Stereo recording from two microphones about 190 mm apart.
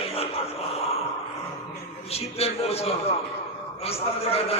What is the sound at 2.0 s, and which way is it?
A man's voice, 30° left (ahead or behind).